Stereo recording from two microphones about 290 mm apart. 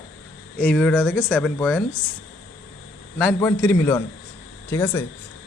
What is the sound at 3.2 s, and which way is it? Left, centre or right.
A man's voice, centre.